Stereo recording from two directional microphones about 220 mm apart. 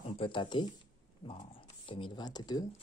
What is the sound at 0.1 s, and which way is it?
Speech, 25° left (ahead or behind).